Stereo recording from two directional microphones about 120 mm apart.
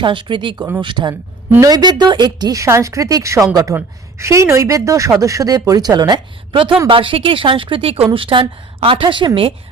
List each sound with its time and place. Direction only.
0.0 s a woman's voice: 40° right (ahead or behind)